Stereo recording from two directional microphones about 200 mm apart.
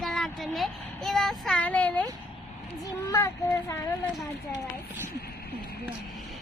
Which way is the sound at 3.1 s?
15° left (ahead or behind).